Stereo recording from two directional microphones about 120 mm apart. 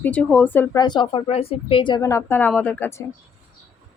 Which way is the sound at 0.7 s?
35° left (ahead or behind).